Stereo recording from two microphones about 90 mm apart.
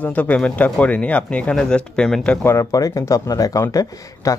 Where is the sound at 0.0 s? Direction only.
15° left (ahead or behind).